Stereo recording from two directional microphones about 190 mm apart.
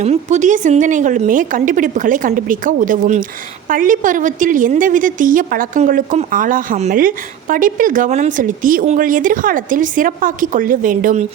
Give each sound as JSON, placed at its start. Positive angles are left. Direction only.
{"t": 0.0, "sound": "a woman's voice", "side_deg": -35}